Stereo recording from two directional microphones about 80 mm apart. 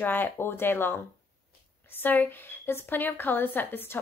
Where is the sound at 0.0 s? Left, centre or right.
Left.